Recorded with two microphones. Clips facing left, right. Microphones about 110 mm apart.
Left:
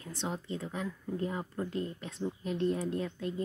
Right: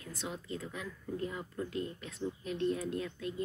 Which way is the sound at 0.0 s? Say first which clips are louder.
Left 4 dB; 30° left (ahead or behind).